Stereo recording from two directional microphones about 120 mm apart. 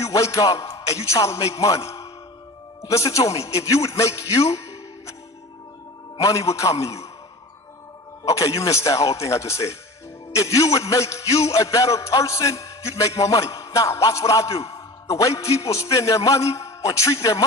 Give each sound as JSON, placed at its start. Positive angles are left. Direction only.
{"t": 0.0, "sound": "a man's voice", "side_deg": 25}
{"t": 6.1, "sound": "a man's voice", "side_deg": 25}
{"t": 8.2, "sound": "a man's voice", "side_deg": 25}